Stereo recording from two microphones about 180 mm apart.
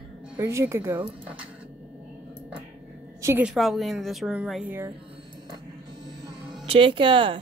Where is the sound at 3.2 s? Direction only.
15° right (ahead or behind).